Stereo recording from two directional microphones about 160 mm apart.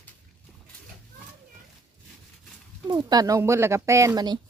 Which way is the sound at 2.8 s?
25° right (ahead or behind).